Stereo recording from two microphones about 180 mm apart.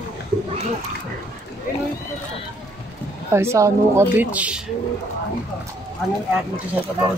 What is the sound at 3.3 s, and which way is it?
Speech, 15° right (ahead or behind).